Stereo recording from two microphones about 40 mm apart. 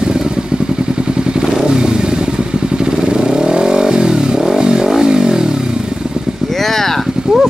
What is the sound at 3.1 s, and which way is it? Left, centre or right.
Vehicle, centre.